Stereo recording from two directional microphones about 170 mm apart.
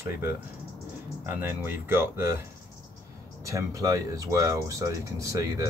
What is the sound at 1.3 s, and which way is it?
Speech, 15° right (ahead or behind).